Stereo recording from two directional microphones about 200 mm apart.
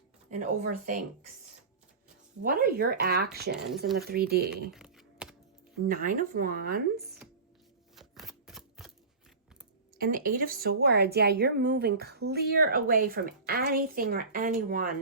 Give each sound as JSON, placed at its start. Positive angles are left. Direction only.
{"t": 0.3, "sound": "speech", "side_deg": -40}
{"t": 2.4, "sound": "a woman's voice", "side_deg": -50}
{"t": 4.7, "sound": "typing", "side_deg": 0}
{"t": 5.7, "sound": "a woman's voice", "side_deg": -45}
{"t": 7.9, "sound": "a sound", "side_deg": 0}
{"t": 10.0, "sound": "a woman's voice", "side_deg": -45}